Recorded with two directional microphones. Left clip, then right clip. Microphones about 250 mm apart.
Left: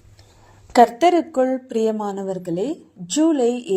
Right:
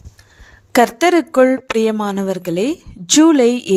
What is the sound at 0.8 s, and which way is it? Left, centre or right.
Speech, right.